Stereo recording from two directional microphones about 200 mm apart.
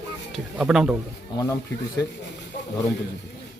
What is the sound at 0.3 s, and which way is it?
Speech, centre (ahead or behind).